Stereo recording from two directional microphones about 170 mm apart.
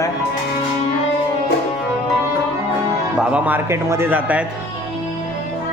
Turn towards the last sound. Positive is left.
turn(degrees=-10)  # may be behind; listen again after turning